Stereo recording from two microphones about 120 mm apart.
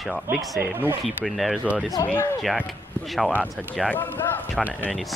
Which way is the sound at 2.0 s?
30° left (ahead or behind).